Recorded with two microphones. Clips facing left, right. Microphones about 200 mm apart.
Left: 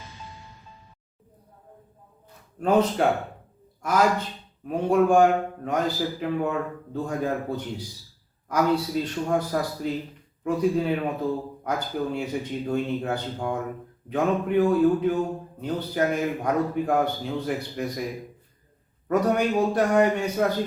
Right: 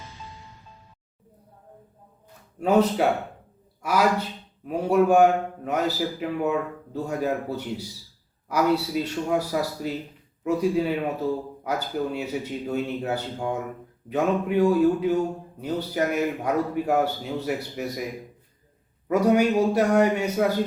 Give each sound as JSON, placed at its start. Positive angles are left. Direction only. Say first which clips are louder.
{"t": 2.6, "sound": "a man's voice", "louder": "right 1 dB", "side_deg": -10}
{"t": 19.0, "sound": "a man's voice", "louder": "right 3 dB", "side_deg": -10}